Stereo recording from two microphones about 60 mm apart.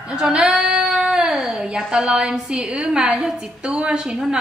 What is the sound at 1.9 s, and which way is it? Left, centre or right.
A woman's voice, centre.